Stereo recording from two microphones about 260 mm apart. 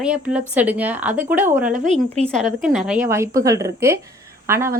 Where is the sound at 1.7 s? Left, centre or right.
Right.